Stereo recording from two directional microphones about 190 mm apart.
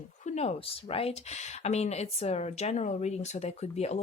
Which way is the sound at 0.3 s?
35° left (ahead or behind).